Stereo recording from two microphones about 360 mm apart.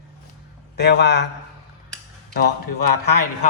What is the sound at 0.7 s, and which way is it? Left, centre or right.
Speech, left.